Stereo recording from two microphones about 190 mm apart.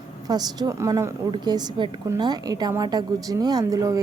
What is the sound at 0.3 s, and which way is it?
A woman's voice, 20° right (ahead or behind).